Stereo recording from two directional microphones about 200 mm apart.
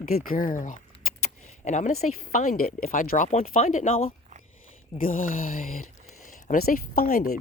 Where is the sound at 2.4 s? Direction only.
45° left (ahead or behind).